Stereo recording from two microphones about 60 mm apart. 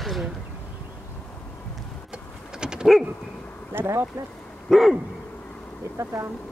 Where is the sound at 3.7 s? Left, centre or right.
Right.